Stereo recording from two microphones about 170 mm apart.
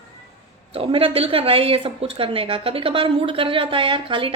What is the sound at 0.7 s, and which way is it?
A woman's voice, 35° right (ahead or behind).